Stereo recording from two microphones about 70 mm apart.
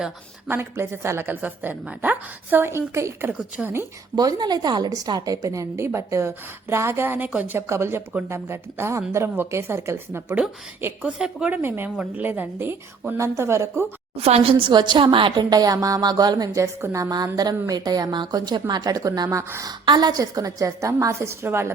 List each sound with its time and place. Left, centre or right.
0.4 s speech: right
1.3 s a woman's voice: right
4.1 s a woman's voice: right
7.7 s speech: right
11.0 s speech: centre
11.5 s a woman's voice: right
13.1 s a woman's voice: right
14.7 s a woman's voice: right
16.6 s a woman's voice: right
17.7 s a woman's voice: right
18.7 s a woman's voice: right
19.3 s a woman's voice: right
19.6 s a woman's voice: right